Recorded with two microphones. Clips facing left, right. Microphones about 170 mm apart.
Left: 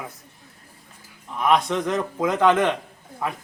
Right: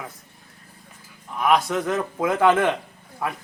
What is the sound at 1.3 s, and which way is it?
A man's voice, centre (ahead or behind).